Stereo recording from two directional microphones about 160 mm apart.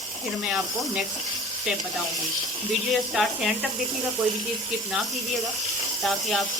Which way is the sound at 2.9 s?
Centre (ahead or behind).